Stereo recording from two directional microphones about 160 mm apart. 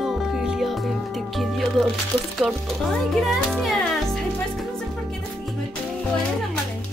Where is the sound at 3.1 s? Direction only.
Centre (ahead or behind).